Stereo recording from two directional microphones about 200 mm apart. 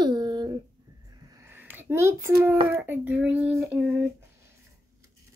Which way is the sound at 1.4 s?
10° right (ahead or behind).